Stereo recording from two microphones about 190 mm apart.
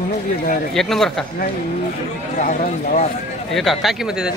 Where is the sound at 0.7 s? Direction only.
Centre (ahead or behind).